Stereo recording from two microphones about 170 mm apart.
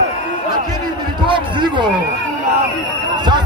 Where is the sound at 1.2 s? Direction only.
30° right (ahead or behind).